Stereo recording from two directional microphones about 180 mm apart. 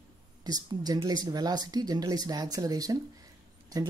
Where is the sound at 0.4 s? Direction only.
20° right (ahead or behind).